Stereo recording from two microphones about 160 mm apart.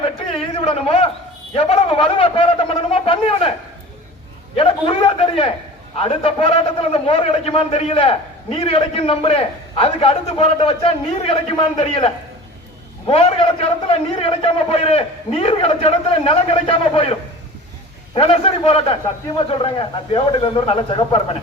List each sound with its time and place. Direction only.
0.5 s a sound: 35° left (ahead or behind)
1.5 s a man's voice: 35° left (ahead or behind)
4.5 s a man's voice: 35° left (ahead or behind)